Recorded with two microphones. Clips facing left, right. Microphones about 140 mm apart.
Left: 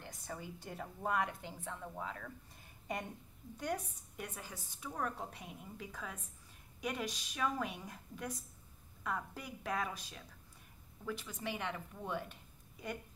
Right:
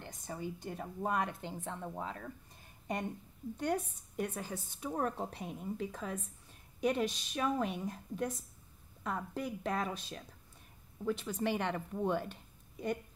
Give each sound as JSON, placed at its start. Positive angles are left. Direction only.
{"t": 0.1, "sound": "a woman's voice", "side_deg": -25}
{"t": 3.5, "sound": "a woman's voice", "side_deg": -30}
{"t": 11.2, "sound": "a woman's voice", "side_deg": -35}